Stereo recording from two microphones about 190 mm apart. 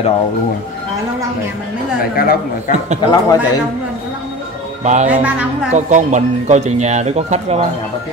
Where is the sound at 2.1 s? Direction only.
50° left (ahead or behind).